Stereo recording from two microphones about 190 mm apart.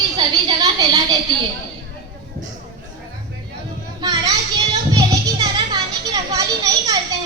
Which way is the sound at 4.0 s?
20° right (ahead or behind).